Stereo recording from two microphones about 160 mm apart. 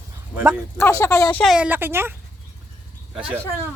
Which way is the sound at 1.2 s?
5° left (ahead or behind).